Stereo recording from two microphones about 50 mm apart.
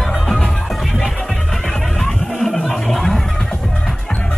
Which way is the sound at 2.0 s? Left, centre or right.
Centre.